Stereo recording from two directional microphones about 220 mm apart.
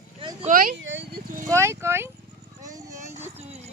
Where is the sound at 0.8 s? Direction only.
55° right (ahead or behind).